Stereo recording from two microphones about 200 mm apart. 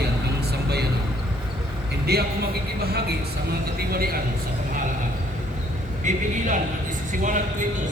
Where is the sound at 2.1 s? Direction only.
55° right (ahead or behind).